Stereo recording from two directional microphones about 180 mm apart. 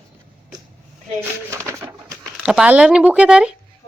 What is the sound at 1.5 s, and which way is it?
Bird, 15° right (ahead or behind).